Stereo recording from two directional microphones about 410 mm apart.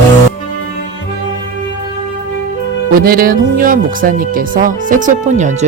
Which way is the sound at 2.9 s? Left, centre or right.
Right.